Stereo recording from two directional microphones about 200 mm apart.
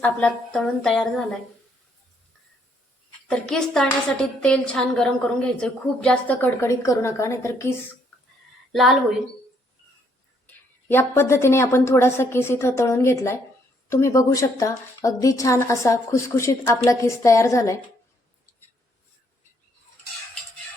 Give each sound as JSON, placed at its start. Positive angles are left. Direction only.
{"t": 0.0, "sound": "a woman's voice", "side_deg": 5}
{"t": 3.2, "sound": "a woman's voice", "side_deg": 5}
{"t": 8.7, "sound": "a woman's voice", "side_deg": 0}
{"t": 10.4, "sound": "a woman's voice", "side_deg": 10}